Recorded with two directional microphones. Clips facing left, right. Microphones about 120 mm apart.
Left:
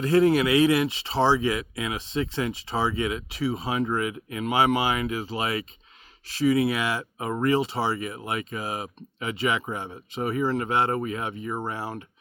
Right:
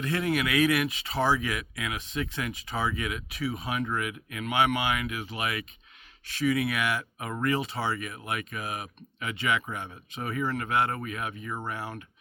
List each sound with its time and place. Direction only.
0.0 s speech: 30° left (ahead or behind)